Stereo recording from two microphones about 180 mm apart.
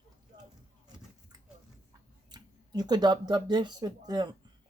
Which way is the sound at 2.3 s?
20° right (ahead or behind).